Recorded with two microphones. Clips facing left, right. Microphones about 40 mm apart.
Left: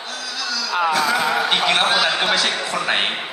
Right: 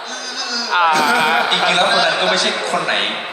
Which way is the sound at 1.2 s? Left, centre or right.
Right.